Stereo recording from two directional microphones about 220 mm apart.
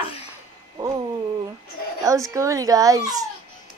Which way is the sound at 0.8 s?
20° right (ahead or behind).